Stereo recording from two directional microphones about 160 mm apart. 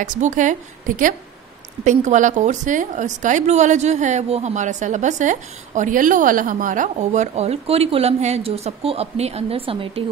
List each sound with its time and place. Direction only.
0.0 s a woman's voice: 50° right (ahead or behind); by 10.0 s 35° right (ahead or behind)